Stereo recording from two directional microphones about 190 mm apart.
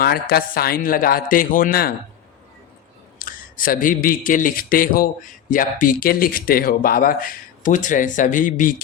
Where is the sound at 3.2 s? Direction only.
45° left (ahead or behind).